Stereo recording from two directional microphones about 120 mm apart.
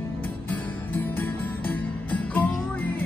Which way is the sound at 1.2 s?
15° left (ahead or behind).